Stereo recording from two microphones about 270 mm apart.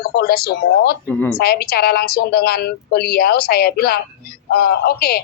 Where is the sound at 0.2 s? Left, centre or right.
Left.